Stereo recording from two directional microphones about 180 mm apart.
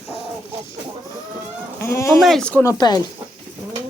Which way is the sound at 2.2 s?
Centre (ahead or behind).